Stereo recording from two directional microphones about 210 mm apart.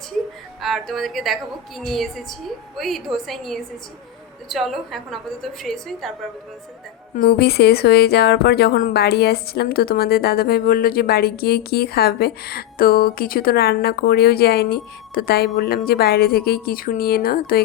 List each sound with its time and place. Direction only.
0.6 s a woman's voice: centre (ahead or behind)
7.2 s speech: 50° left (ahead or behind)